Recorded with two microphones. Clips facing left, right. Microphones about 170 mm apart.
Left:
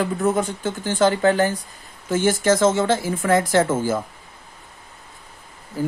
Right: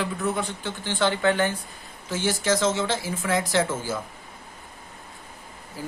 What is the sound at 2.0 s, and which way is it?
Speech, 50° left (ahead or behind).